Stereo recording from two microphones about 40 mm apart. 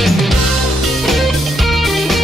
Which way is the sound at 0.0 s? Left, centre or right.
Centre.